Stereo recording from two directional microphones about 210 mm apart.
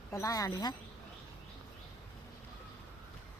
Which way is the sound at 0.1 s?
15° left (ahead or behind).